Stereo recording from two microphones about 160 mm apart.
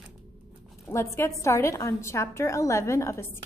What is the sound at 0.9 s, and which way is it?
A woman's voice, 15° left (ahead or behind).